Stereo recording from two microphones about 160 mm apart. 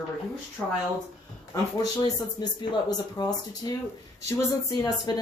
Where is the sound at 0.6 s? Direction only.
5° left (ahead or behind).